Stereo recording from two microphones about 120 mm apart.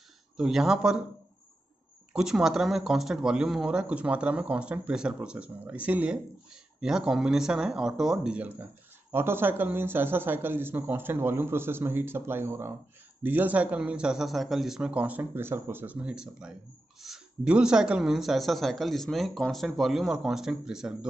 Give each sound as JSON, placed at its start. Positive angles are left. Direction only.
{"t": 0.4, "sound": "speech", "side_deg": -5}
{"t": 2.1, "sound": "a man's voice", "side_deg": -5}